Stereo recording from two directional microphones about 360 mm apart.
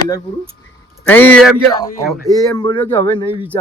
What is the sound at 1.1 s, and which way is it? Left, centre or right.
Speech, centre.